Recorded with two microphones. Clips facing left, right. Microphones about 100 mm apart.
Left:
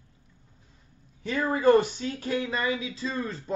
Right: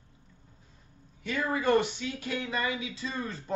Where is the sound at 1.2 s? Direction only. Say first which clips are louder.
Left 5 dB; 35° left (ahead or behind).